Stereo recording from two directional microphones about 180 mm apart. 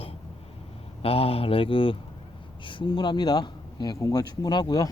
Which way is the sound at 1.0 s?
30° left (ahead or behind).